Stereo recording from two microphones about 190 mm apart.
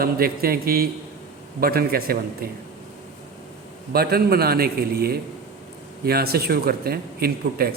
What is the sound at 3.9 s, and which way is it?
A man's voice, 55° right (ahead or behind).